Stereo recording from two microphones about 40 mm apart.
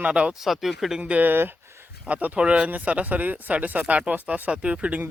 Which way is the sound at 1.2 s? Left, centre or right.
Right.